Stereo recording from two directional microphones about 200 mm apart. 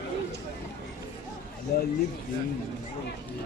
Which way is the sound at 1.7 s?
50° left (ahead or behind).